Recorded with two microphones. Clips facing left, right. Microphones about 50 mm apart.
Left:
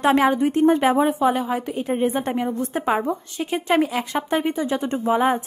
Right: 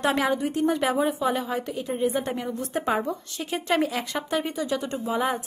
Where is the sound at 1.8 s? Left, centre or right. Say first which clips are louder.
Left 3 dB; left; by 3.1 s centre.